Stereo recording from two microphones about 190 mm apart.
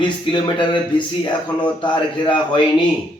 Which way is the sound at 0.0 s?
25° left (ahead or behind).